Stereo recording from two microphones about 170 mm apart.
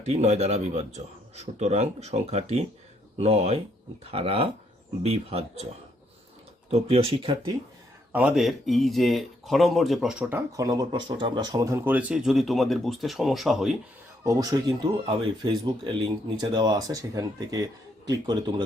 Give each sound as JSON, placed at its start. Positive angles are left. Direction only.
{"t": 0.0, "sound": "speech", "side_deg": -40}
{"t": 6.7, "sound": "speech", "side_deg": -35}
{"t": 8.1, "sound": "speech", "side_deg": -5}
{"t": 14.3, "sound": "speech", "side_deg": -20}